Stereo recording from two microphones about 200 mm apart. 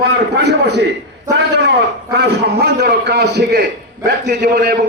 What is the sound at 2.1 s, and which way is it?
A man's voice, 55° right (ahead or behind).